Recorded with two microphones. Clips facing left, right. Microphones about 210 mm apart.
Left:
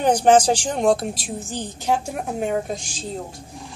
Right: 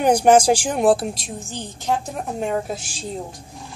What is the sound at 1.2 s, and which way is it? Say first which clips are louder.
Speech: left 3 dB; 10° left (ahead or behind).